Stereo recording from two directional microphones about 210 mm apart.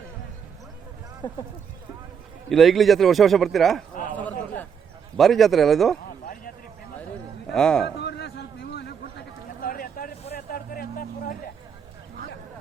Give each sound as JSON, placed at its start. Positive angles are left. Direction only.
{"t": 2.5, "sound": "a man's voice", "side_deg": 0}
{"t": 4.2, "sound": "a sound", "side_deg": 5}
{"t": 5.1, "sound": "a man's voice", "side_deg": 0}
{"t": 7.5, "sound": "a man's voice", "side_deg": 5}
{"t": 7.9, "sound": "a sound", "side_deg": 50}
{"t": 10.3, "sound": "vehicle", "side_deg": 45}